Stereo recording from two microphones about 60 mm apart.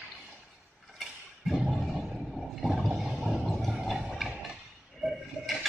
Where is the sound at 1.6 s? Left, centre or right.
Centre.